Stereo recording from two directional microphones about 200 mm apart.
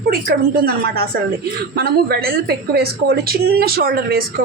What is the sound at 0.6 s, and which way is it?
A woman's voice, 50° right (ahead or behind).